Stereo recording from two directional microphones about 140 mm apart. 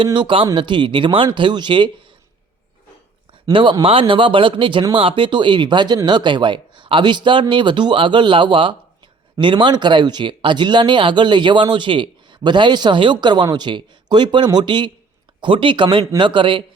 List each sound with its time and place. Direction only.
0.0 s speech: 35° right (ahead or behind)
3.4 s speech: 35° right (ahead or behind)